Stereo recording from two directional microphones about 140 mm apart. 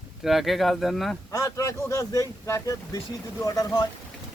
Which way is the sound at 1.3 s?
25° left (ahead or behind).